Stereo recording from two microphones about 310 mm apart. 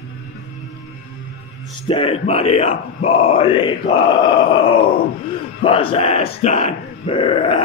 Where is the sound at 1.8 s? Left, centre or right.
Centre.